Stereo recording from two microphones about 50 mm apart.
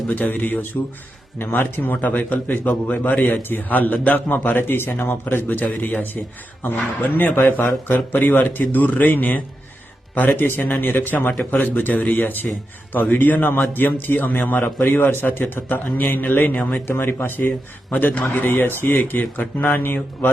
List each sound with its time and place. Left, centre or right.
0.1 s a man's voice: left
6.7 s a man's voice: left
14.6 s a man's voice: left
16.8 s a man's voice: left
17.9 s a man's voice: left
18.4 s a man's voice: left
19.6 s a man's voice: left